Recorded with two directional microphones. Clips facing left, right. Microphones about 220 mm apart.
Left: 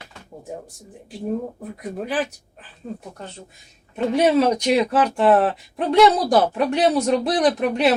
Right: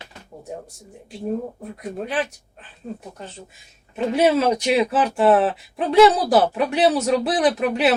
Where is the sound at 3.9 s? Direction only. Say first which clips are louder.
Left 1 dB; 5° right (ahead or behind).